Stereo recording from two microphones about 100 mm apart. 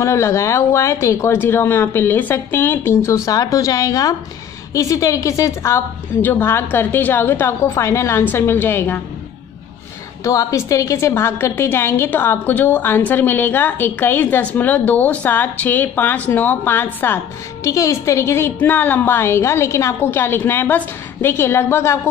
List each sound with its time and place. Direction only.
0.0 s a woman's voice: 30° left (ahead or behind)
10.2 s a woman's voice: 35° left (ahead or behind)
17.6 s a woman's voice: 30° left (ahead or behind)